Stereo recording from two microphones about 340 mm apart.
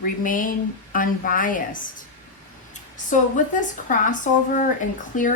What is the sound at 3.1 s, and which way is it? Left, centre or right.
A woman's voice, left.